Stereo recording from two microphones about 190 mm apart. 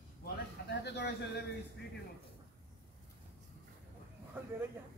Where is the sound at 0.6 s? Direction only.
65° left (ahead or behind).